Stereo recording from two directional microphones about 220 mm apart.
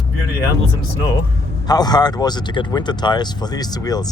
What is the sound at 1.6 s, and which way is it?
Speech, 20° left (ahead or behind).